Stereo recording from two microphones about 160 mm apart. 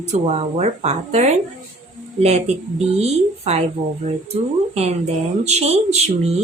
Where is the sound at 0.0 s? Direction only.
45° right (ahead or behind).